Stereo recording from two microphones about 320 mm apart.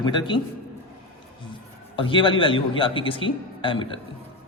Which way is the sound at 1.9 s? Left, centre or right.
Centre.